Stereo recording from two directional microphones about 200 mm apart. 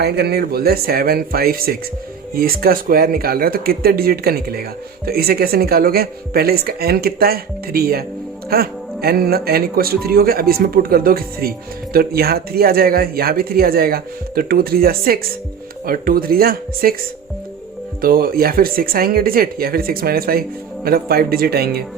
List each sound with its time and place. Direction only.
0.0 s speech: 55° right (ahead or behind)
18.0 s speech: 45° right (ahead or behind)